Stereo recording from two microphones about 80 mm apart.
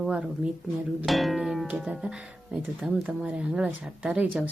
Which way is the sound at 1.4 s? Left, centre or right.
Centre.